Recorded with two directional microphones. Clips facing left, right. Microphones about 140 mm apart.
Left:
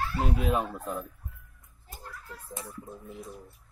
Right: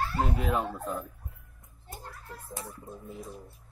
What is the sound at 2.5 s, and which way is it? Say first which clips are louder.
Speech: left 1 dB; centre (ahead or behind).